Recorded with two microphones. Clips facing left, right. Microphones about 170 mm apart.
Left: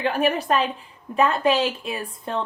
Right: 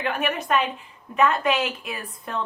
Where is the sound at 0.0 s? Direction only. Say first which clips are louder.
Left 4 dB; 35° left (ahead or behind).